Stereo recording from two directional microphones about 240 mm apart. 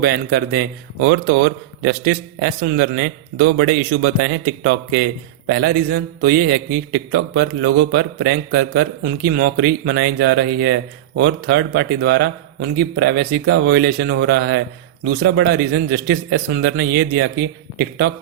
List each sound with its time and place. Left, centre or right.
0.0 s a man's voice: right